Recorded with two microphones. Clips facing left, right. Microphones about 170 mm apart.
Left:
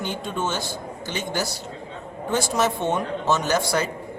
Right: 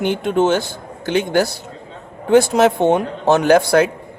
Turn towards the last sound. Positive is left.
turn(degrees=-60)  # may be behind; listen again after turning